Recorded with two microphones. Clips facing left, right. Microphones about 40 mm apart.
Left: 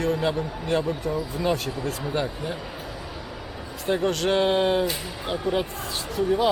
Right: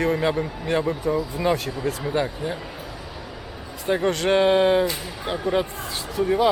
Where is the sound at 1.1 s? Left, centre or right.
Right.